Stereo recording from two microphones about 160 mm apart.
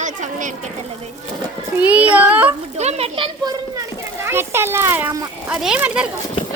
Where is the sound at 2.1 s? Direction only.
10° right (ahead or behind).